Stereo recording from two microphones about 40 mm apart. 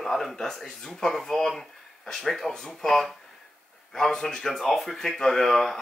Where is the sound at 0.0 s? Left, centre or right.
Centre.